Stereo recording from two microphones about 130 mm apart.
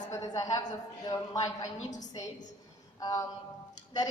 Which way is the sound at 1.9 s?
70° left (ahead or behind).